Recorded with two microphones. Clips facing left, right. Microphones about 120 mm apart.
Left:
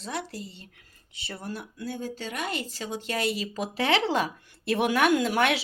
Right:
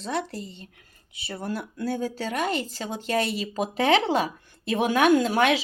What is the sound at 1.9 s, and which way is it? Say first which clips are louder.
Speech: right 6 dB; 90° right.